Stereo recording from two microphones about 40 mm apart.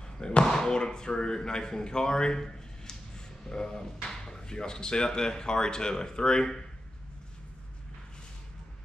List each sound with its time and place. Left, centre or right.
0.2 s speech: left